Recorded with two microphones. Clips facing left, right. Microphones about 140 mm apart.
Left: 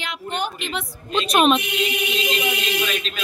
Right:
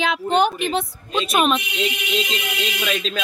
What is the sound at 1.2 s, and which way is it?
Speech, centre (ahead or behind).